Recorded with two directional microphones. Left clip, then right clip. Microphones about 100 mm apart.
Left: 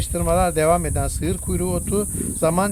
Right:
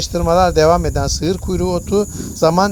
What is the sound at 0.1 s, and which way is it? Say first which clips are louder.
Speech: right 6 dB; 30° right (ahead or behind).